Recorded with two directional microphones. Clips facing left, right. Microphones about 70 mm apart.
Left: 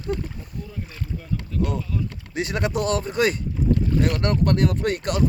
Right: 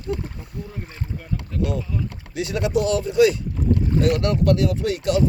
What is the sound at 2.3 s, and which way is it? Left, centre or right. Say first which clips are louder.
Speech: right 3 dB; left.